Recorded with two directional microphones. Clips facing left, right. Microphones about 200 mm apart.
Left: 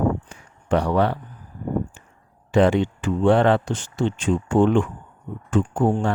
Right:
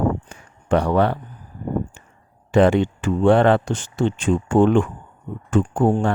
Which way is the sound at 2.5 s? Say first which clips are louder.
Right 2 dB; 55° right (ahead or behind).